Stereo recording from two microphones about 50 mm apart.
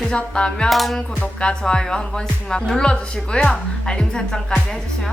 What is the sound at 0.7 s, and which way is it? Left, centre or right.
Music, centre.